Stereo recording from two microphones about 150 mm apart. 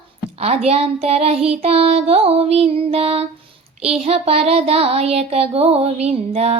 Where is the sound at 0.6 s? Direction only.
45° right (ahead or behind).